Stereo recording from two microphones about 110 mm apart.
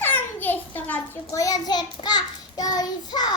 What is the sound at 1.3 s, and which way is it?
Child singing, 30° left (ahead or behind).